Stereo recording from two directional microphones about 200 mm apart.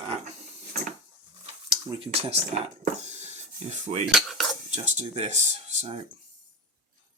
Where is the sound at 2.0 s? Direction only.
30° right (ahead or behind).